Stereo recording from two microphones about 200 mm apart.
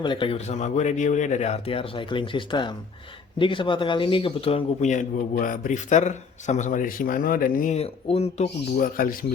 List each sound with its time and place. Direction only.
0.0 s speech: 25° left (ahead or behind)
8.8 s a man's voice: 45° left (ahead or behind)